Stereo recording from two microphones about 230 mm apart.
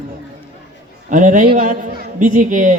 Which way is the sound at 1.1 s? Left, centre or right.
Right.